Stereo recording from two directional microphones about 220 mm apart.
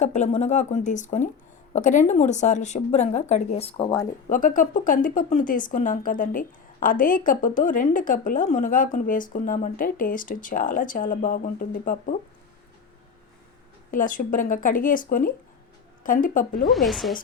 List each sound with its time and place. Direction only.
0.0 s speech: 30° left (ahead or behind)
4.3 s speech: 35° left (ahead or behind)
13.9 s speech: 40° left (ahead or behind)
16.6 s speech: centre (ahead or behind)